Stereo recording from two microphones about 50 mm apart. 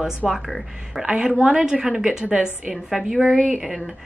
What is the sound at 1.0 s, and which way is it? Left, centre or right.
A woman's voice, centre.